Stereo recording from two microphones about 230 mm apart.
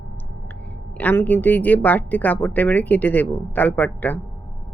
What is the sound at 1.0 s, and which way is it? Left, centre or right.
Speech, centre.